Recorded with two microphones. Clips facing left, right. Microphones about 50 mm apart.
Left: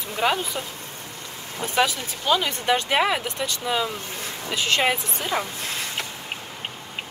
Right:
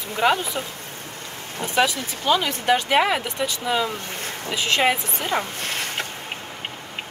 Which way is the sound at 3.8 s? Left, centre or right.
Right.